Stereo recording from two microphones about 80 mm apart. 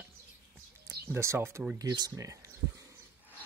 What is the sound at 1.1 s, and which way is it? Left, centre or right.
Speech, right.